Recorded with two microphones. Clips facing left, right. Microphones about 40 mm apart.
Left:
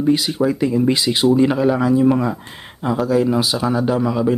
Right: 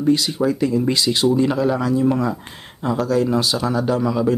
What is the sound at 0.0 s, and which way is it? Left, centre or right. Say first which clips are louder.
Speech: left 1 dB; centre.